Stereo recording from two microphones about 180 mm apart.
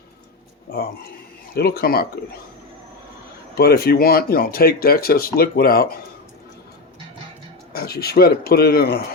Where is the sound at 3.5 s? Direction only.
60° left (ahead or behind).